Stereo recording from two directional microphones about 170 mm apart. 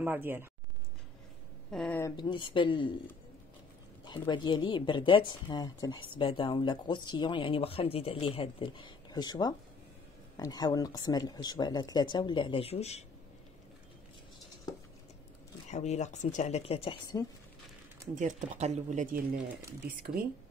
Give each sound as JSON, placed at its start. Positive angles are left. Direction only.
{"t": 0.0, "sound": "speech", "side_deg": -10}
{"t": 1.7, "sound": "speech", "side_deg": 5}
{"t": 2.1, "sound": "speech", "side_deg": 30}
{"t": 4.3, "sound": "speech", "side_deg": 25}
{"t": 15.7, "sound": "speech", "side_deg": 40}
{"t": 18.1, "sound": "speech", "side_deg": -45}